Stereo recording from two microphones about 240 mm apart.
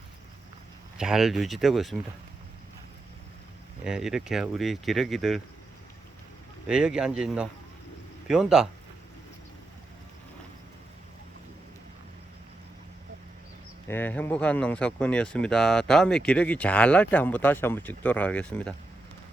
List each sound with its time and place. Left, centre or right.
0.9 s speech: centre
3.8 s speech: centre
6.7 s speech: centre
13.8 s speech: centre